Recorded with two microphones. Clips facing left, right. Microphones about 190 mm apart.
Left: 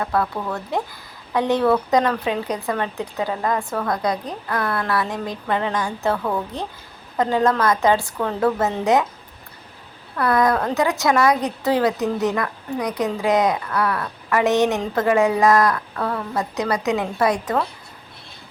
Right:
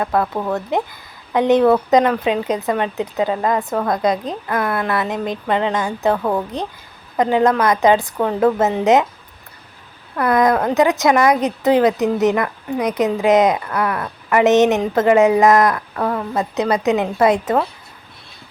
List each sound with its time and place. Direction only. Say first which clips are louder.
0.0 s a woman's voice: right 3 dB; 25° right (ahead or behind)
10.2 s speech: right 3 dB; 20° right (ahead or behind)